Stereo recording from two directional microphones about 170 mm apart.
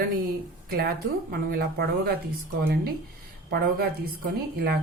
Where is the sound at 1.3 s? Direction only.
60° right (ahead or behind).